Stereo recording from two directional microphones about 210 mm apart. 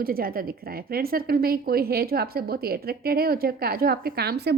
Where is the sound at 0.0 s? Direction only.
45° right (ahead or behind).